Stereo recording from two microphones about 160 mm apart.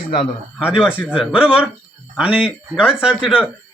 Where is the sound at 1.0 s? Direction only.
5° right (ahead or behind).